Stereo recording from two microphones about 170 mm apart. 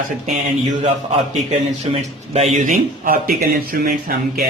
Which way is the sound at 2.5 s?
50° right (ahead or behind).